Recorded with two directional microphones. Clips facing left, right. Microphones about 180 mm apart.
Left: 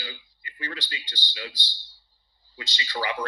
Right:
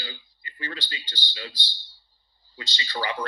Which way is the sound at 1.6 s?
60° right (ahead or behind).